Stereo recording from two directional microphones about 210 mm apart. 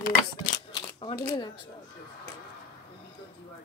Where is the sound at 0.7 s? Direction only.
25° left (ahead or behind).